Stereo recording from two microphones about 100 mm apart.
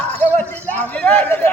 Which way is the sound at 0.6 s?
15° left (ahead or behind).